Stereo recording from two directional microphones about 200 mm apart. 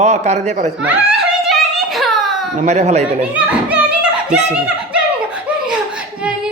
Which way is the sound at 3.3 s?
5° right (ahead or behind).